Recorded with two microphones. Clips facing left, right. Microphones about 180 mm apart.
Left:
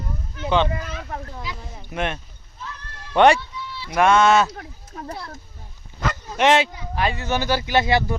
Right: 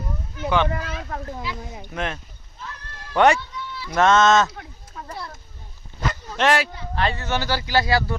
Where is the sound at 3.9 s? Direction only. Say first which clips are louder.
Even; 10° left (ahead or behind).